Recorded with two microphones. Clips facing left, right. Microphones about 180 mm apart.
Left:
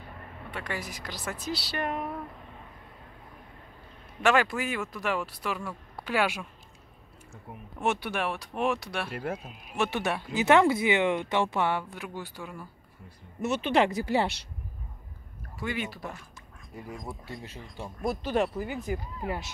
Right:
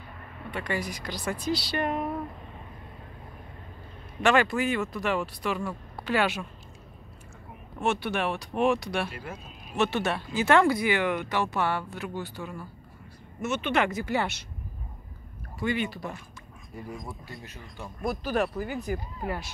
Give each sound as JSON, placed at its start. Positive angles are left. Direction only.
{"t": 0.5, "sound": "speech", "side_deg": 0}
{"t": 4.2, "sound": "speech", "side_deg": 5}
{"t": 7.8, "sound": "speech", "side_deg": 15}
{"t": 9.1, "sound": "speech", "side_deg": 60}
{"t": 9.8, "sound": "speech", "side_deg": 15}
{"t": 13.4, "sound": "speech", "side_deg": 35}
{"t": 15.6, "sound": "speech", "side_deg": 5}
{"t": 17.0, "sound": "speech", "side_deg": 25}